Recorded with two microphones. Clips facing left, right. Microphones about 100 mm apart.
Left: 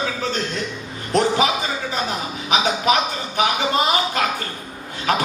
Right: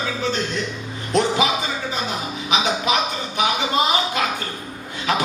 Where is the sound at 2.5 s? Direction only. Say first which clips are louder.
Left 2 dB; 45° left (ahead or behind).